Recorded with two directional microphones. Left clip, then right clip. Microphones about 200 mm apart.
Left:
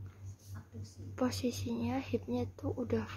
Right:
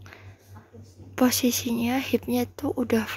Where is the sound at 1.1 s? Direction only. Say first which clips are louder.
Right 12 dB; 25° right (ahead or behind).